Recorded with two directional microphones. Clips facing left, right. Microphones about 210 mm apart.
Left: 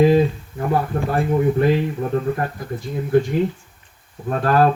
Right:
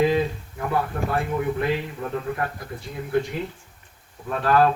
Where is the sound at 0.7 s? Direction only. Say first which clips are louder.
Left 4 dB; 35° left (ahead or behind).